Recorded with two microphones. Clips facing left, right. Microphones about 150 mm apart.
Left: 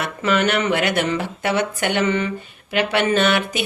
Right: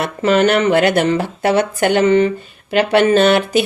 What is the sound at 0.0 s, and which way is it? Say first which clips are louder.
Speech: right 6 dB; 35° right (ahead or behind).